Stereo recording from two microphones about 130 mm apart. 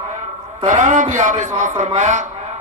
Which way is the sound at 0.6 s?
80° right.